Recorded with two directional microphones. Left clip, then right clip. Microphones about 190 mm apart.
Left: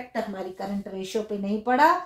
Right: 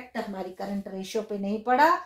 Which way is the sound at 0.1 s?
25° right (ahead or behind).